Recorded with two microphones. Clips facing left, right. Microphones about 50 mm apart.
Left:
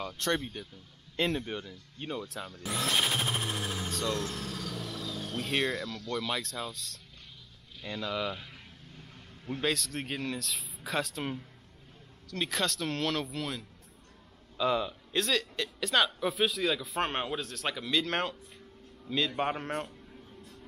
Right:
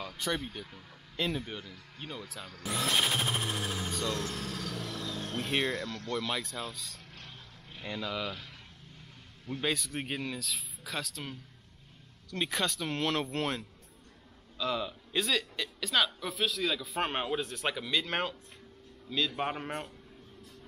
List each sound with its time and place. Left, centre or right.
0.0 s speech: centre
9.6 s speech: centre
12.3 s speech: centre
13.3 s speech: right
14.6 s speech: centre
17.4 s speech: centre
17.7 s speech: centre
19.1 s speech: centre